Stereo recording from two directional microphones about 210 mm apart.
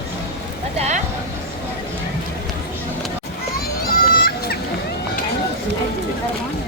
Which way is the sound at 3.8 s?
45° left (ahead or behind).